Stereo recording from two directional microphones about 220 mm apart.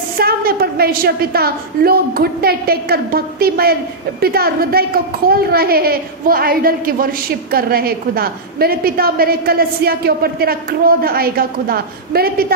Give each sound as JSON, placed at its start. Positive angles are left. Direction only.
{"t": 0.2, "sound": "a woman's voice", "side_deg": -45}